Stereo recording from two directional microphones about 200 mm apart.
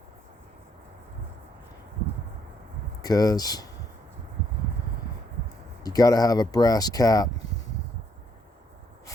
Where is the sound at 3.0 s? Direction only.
20° left (ahead or behind).